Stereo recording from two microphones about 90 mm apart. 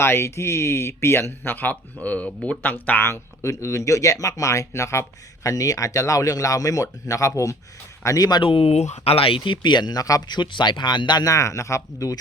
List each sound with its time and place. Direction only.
0.0 s a man's voice: 30° left (ahead or behind)
8.4 s speech: 90° left; by 12.2 s 40° left (ahead or behind)